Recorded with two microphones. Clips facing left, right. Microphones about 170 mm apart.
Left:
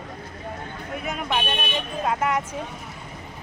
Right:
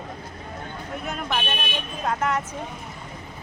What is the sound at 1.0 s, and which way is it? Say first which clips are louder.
Speech: left 2 dB; 5° left (ahead or behind).